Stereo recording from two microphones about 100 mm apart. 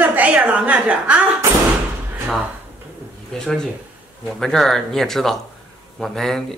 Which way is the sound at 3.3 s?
5° left (ahead or behind).